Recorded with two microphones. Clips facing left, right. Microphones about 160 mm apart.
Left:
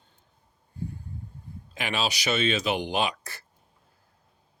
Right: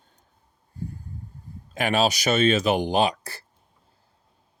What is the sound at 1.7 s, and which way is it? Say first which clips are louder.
Speech: right 7 dB; 45° right (ahead or behind).